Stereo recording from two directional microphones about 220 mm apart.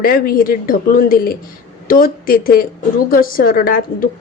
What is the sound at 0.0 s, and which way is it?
A woman's voice, 40° left (ahead or behind).